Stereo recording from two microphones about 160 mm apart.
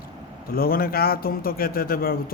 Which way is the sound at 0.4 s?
65° left (ahead or behind).